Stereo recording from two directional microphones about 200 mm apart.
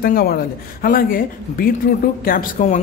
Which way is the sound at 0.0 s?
50° left (ahead or behind).